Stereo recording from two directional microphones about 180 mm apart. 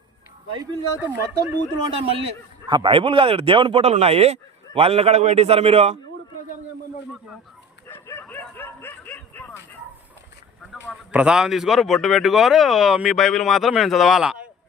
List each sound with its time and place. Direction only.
0.6 s speech: 15° right (ahead or behind)
2.0 s a man's voice: 30° right (ahead or behind)
7.9 s bow-wow: 10° left (ahead or behind)
10.8 s a man's voice: 5° right (ahead or behind)